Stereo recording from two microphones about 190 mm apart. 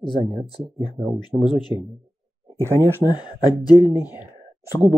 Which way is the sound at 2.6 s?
15° left (ahead or behind).